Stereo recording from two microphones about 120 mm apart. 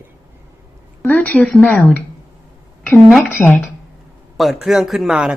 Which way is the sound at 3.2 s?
15° left (ahead or behind).